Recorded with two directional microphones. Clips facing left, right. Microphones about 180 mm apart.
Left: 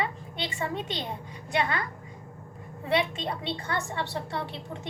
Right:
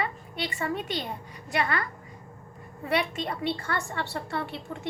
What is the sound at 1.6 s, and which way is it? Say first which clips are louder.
Speech: even; 20° left (ahead or behind).